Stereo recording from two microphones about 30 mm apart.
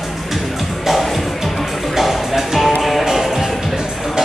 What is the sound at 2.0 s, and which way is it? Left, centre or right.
Music, centre.